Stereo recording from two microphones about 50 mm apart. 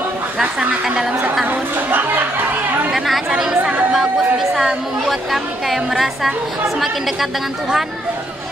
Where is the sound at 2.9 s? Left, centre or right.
Centre.